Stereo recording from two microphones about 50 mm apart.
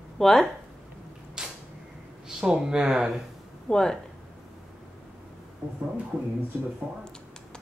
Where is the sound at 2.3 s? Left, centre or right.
Centre.